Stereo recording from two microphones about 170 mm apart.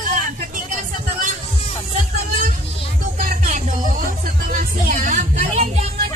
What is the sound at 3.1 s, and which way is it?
Music, 50° right (ahead or behind).